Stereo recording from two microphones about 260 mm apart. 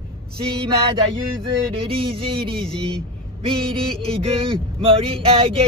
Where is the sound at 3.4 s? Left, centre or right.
Right.